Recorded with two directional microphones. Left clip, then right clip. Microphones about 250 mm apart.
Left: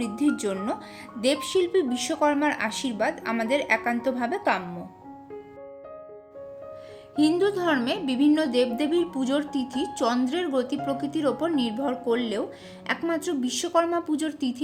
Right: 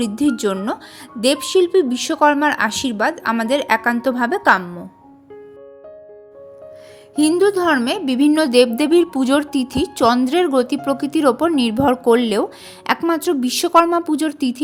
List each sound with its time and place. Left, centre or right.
0.0 s a woman's voice: right
7.2 s a woman's voice: right